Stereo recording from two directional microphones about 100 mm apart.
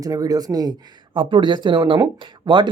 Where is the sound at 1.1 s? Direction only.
55° right (ahead or behind).